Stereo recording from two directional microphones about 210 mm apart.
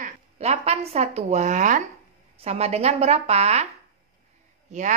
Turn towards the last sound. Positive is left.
turn(degrees=-35)  # may be behind; listen again after turning